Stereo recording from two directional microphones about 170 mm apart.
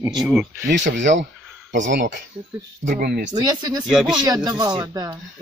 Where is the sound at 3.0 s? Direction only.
70° right (ahead or behind).